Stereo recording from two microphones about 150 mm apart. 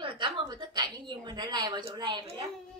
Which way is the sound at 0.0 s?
35° right (ahead or behind).